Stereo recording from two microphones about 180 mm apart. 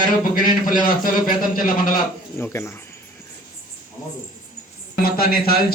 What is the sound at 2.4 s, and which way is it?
Speech, 15° left (ahead or behind).